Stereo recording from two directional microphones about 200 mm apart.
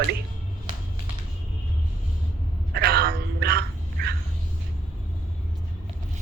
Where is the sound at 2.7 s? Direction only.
50° right (ahead or behind).